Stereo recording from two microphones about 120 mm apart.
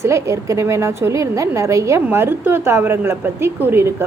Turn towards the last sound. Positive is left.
turn(degrees=-20)  # may be behind; listen again after turning